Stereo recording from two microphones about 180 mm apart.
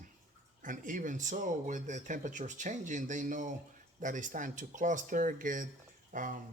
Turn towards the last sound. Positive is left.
turn(degrees=-50)  # may be behind; listen again after turning